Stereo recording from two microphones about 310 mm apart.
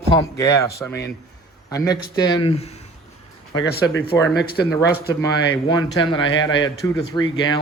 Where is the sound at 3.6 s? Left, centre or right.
Left.